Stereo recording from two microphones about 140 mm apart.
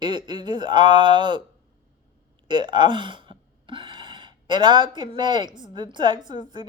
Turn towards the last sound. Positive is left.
turn(degrees=-35)  # may be behind; listen again after turning